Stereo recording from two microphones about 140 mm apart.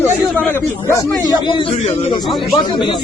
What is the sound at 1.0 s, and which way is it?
Speech, 30° left (ahead or behind).